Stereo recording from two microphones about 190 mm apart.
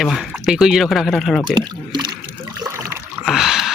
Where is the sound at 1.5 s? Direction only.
25° right (ahead or behind).